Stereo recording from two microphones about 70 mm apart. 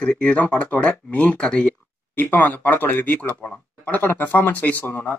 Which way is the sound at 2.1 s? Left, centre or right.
Left.